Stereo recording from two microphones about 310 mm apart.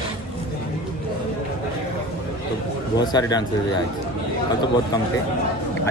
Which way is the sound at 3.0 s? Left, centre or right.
Centre.